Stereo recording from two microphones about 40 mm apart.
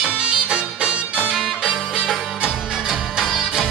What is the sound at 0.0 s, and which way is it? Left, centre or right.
Music, centre.